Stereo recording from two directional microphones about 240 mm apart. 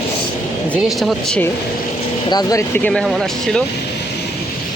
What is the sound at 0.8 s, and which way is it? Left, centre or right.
Speech, centre.